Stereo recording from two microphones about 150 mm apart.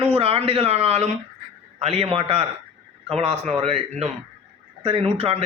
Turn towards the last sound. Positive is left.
turn(degrees=-40)  # may be behind; listen again after turning